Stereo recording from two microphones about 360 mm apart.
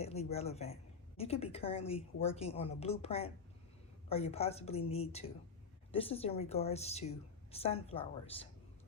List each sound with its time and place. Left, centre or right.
0.0 s a woman's voice: centre